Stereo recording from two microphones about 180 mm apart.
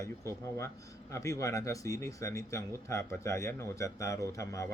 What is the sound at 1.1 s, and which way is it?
Speech, 15° left (ahead or behind).